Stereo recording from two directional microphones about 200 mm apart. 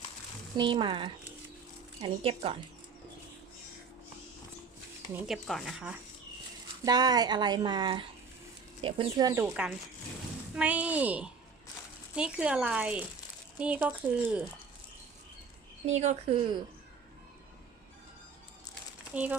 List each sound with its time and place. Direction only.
0.5 s speech: 25° right (ahead or behind)
5.2 s speech: centre (ahead or behind)
6.8 s speech: 20° right (ahead or behind)
15.9 s speech: 35° right (ahead or behind)
19.1 s speech: 5° right (ahead or behind)